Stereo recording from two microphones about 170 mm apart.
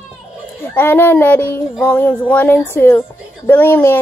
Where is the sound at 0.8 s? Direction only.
15° left (ahead or behind).